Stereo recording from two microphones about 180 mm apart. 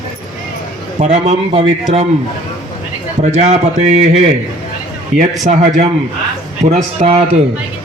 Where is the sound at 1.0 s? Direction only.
40° right (ahead or behind).